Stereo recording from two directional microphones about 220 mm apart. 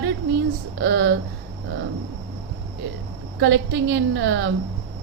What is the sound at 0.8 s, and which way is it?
Speech, 55° right (ahead or behind).